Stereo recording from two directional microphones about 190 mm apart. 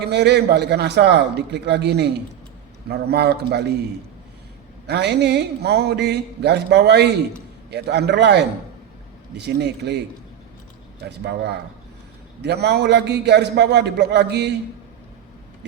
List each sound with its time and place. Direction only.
0.0 s speech: 60° right (ahead or behind)
11.0 s speech: 60° right (ahead or behind)